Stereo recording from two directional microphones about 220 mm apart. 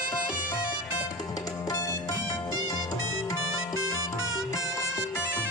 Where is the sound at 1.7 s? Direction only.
15° left (ahead or behind).